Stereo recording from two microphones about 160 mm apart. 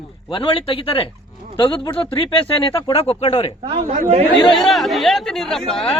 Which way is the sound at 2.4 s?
30° left (ahead or behind).